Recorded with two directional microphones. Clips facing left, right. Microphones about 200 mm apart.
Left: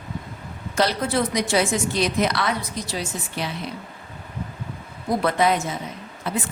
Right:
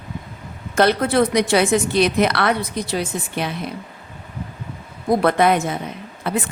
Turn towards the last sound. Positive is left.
turn(degrees=-60)  # may be behind; listen again after turning